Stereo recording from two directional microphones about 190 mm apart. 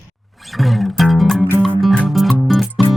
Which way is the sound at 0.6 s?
Centre (ahead or behind).